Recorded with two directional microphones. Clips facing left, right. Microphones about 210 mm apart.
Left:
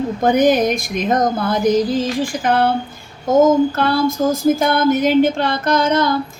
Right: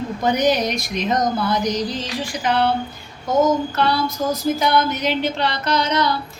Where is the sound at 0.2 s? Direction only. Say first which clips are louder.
Left 5 dB; 50° left (ahead or behind).